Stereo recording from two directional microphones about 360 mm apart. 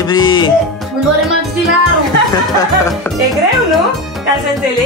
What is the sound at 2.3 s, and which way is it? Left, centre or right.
Speech, centre.